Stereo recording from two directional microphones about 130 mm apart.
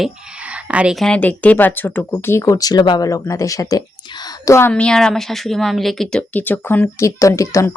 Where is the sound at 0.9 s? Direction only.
5° left (ahead or behind); by 4.7 s 20° left (ahead or behind).